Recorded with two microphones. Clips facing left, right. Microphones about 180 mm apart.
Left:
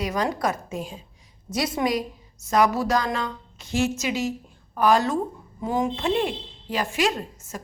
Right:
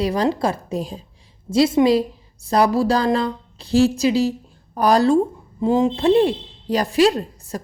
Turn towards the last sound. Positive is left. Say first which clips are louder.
# right 6 dB
turn(degrees=-35)  # may be behind; listen again after turning